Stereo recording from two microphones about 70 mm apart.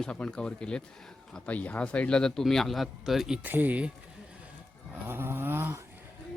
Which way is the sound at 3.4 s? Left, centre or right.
Right.